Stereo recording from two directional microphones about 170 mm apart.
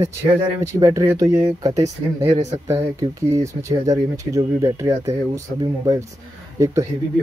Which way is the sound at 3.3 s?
20° right (ahead or behind).